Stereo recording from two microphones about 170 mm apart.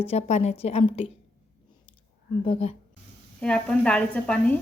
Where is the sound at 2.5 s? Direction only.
35° left (ahead or behind).